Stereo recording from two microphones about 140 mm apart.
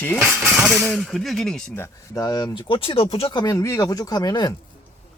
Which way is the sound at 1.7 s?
15° left (ahead or behind).